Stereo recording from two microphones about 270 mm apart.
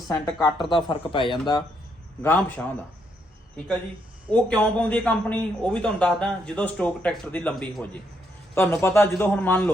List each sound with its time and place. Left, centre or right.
0.4 s speech: centre
4.3 s a man's voice: centre